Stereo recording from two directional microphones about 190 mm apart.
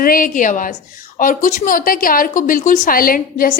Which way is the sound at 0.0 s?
45° left (ahead or behind).